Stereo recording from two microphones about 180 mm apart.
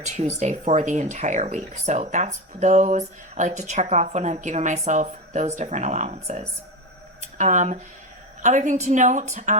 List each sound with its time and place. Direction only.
0.3 s a woman's voice: 40° right (ahead or behind)